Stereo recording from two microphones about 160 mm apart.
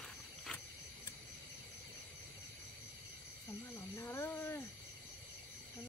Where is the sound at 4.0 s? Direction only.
15° left (ahead or behind).